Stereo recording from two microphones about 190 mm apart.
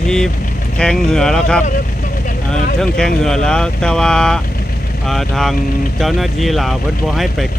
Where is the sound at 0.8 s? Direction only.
5° left (ahead or behind).